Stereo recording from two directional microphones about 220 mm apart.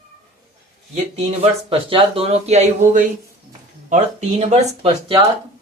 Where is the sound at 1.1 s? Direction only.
30° right (ahead or behind).